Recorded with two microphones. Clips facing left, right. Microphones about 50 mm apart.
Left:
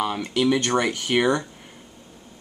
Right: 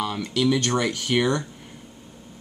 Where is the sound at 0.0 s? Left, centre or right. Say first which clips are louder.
Left 1 dB; centre.